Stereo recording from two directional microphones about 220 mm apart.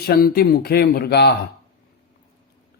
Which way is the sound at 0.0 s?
40° left (ahead or behind).